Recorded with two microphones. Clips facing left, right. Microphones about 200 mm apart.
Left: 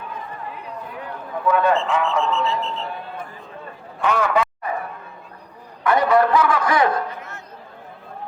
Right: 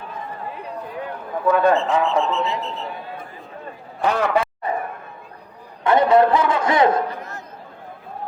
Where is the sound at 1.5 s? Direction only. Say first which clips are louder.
Right 2 dB; 35° right (ahead or behind).